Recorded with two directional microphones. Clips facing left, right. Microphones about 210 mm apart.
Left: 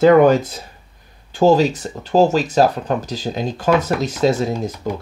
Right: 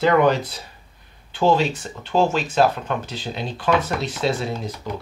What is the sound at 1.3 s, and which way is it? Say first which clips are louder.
Speech: left 5 dB; 40° left (ahead or behind).